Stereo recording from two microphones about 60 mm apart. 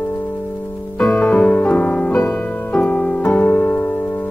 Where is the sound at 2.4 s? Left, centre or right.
Left.